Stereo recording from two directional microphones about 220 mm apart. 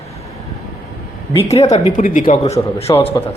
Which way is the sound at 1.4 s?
30° left (ahead or behind).